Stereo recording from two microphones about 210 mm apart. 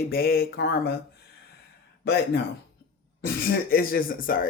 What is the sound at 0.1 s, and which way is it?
Speech, 45° left (ahead or behind).